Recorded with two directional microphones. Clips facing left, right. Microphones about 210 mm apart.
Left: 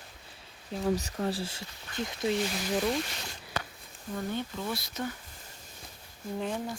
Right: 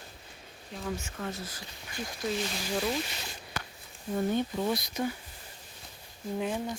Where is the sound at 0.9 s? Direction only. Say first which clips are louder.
Left 6 dB; 35° left (ahead or behind).